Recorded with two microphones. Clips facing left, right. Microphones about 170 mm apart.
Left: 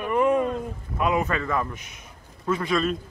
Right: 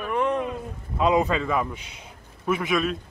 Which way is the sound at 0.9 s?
20° right (ahead or behind).